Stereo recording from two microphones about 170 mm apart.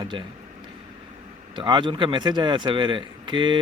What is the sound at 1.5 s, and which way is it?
Speech, 25° right (ahead or behind).